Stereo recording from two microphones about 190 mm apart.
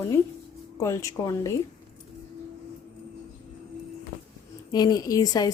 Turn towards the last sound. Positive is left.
turn(degrees=20)  # may be behind; listen again after turning